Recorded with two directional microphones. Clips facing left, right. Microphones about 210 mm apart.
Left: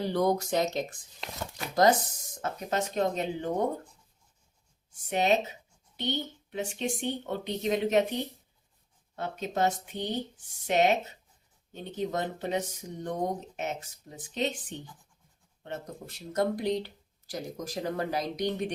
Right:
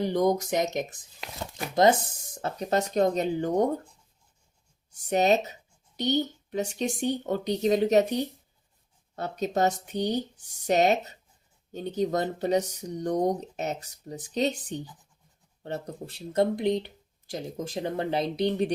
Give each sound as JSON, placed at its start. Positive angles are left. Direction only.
{"t": 0.0, "sound": "speech", "side_deg": -15}
{"t": 2.4, "sound": "speech", "side_deg": -35}
{"t": 5.0, "sound": "speech", "side_deg": -40}